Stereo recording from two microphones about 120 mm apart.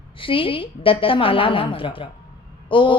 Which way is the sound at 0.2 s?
45° left (ahead or behind).